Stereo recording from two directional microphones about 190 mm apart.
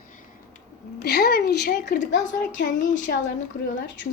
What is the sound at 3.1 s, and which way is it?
Speech, 50° left (ahead or behind).